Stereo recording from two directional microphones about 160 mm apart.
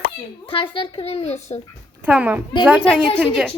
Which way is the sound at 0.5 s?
35° left (ahead or behind).